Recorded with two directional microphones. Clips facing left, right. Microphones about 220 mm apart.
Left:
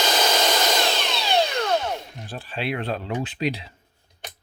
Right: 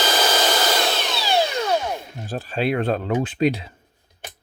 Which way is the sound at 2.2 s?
45° right (ahead or behind).